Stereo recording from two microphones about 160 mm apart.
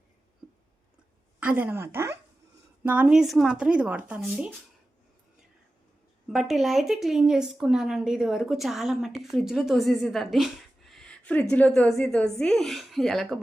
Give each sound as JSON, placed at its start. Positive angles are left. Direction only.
{"t": 1.4, "sound": "speech", "side_deg": -10}
{"t": 6.2, "sound": "speech", "side_deg": 0}